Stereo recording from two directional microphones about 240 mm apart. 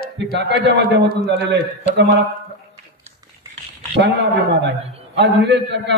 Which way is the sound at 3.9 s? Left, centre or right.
Right.